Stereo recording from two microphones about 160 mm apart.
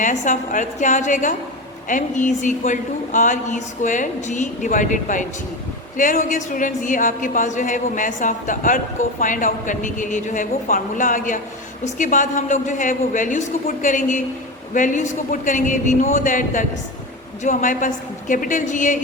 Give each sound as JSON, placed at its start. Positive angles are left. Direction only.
{"t": 0.0, "sound": "a woman's voice", "side_deg": 55}